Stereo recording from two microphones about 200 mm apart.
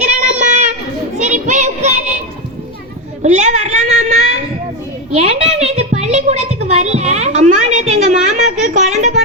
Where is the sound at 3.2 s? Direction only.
35° right (ahead or behind).